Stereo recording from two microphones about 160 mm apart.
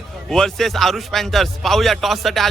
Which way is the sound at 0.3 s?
Centre (ahead or behind).